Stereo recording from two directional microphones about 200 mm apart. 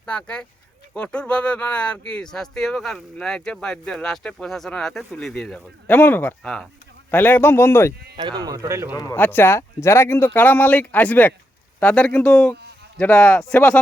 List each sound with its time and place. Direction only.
0.0 s speech: 5° left (ahead or behind)
8.1 s speech: 20° right (ahead or behind)
9.0 s speech: 15° left (ahead or behind)